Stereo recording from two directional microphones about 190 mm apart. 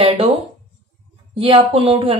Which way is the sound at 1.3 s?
30° right (ahead or behind).